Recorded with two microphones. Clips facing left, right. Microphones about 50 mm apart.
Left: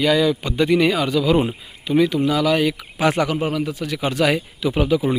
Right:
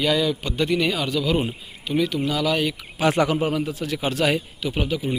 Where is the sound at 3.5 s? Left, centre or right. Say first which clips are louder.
Left 2 dB; left.